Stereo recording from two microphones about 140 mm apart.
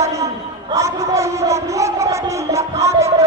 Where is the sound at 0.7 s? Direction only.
20° right (ahead or behind).